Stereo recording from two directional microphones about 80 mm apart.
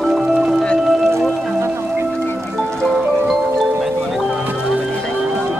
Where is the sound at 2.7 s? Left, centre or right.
Centre.